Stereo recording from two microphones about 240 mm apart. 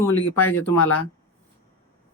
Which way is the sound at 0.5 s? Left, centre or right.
Left.